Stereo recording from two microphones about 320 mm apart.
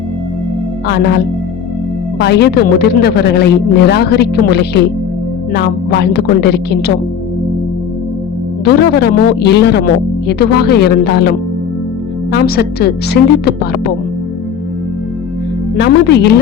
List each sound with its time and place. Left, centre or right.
2.1 s speech: left
8.6 s a woman's voice: left
15.8 s speech: left